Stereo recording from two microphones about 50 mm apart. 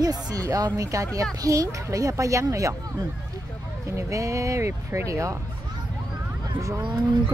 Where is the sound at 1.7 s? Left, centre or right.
Right.